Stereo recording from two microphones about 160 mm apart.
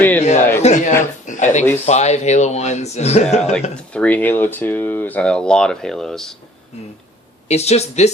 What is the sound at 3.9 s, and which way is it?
Speech, 10° left (ahead or behind).